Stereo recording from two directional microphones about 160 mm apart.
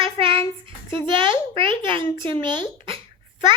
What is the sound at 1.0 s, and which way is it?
A child's voice, 30° right (ahead or behind).